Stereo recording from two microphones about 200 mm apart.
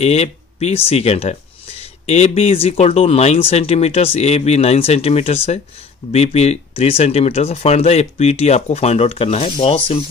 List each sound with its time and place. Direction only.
0.0 s speech: 30° left (ahead or behind)